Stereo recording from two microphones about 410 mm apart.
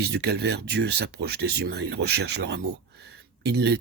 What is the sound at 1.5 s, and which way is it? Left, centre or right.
Speech, right.